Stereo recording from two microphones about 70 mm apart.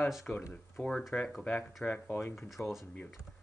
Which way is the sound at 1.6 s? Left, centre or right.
Centre.